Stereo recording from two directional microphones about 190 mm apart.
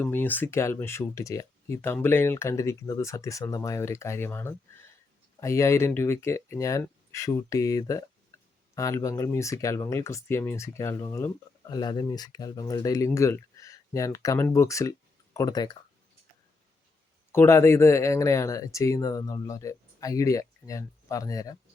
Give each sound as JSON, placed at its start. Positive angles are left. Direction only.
{"t": 0.0, "sound": "speech", "side_deg": 10}
{"t": 17.3, "sound": "speech", "side_deg": 15}